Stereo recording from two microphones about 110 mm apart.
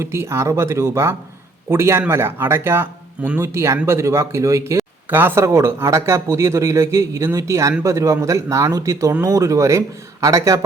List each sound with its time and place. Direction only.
0.0 s speech: 25° right (ahead or behind)